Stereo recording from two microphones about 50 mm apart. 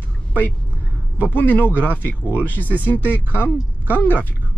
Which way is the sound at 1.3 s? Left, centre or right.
Left.